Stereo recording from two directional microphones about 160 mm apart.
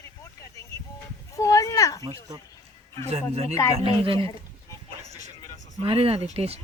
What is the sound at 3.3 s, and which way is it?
Speech, 40° right (ahead or behind).